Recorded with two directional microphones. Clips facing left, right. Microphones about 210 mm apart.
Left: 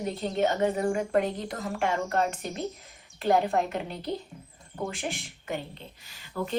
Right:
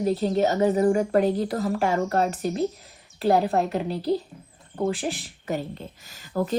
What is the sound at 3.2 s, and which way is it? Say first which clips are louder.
A woman's voice: right 3 dB; 35° right (ahead or behind).